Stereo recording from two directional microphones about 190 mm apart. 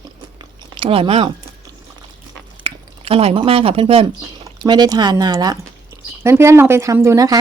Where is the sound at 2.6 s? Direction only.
30° right (ahead or behind).